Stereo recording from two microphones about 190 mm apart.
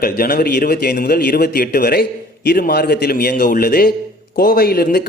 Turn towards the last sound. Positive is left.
turn(degrees=55)  # may be behind; listen again after turning